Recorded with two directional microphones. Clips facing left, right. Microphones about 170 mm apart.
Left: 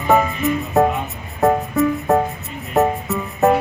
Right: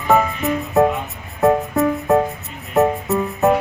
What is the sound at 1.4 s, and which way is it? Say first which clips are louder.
Music: right 1 dB; centre (ahead or behind).